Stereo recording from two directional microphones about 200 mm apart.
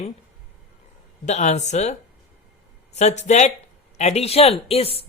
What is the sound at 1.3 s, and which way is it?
Speech, 35° left (ahead or behind).